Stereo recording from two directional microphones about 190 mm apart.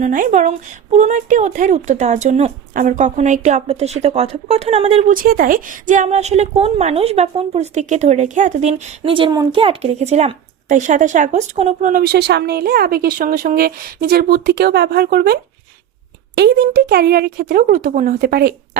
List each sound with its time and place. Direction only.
0.0 s speech: 40° right (ahead or behind)
5.1 s speech: 50° right (ahead or behind)